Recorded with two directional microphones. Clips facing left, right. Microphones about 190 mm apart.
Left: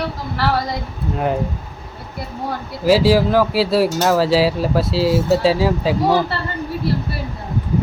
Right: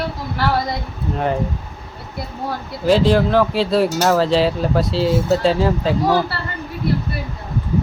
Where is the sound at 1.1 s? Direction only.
Centre (ahead or behind).